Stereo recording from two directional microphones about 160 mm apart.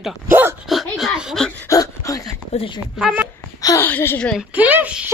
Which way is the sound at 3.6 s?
20° left (ahead or behind).